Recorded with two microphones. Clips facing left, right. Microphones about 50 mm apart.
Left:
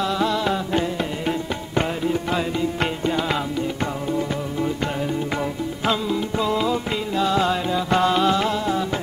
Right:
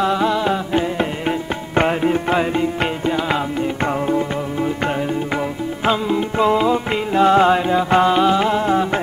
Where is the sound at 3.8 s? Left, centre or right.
Right.